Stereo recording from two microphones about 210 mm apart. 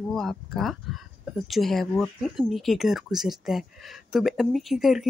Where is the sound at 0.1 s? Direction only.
Centre (ahead or behind).